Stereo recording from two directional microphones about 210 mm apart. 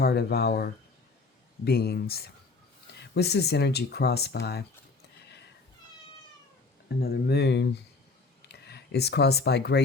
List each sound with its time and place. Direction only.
0.0 s speech: 50° left (ahead or behind)
6.8 s speech: 50° left (ahead or behind)